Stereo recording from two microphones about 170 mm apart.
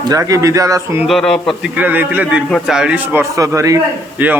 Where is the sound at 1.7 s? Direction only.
10° right (ahead or behind).